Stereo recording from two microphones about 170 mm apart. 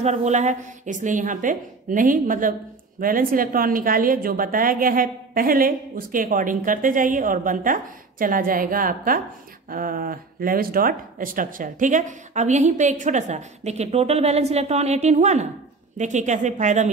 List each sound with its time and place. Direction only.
0.0 s a woman's voice: 40° right (ahead or behind)